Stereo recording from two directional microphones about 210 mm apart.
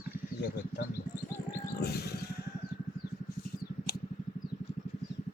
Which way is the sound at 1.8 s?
50° left (ahead or behind).